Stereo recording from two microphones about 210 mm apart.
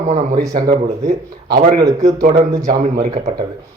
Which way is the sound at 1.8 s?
15° right (ahead or behind).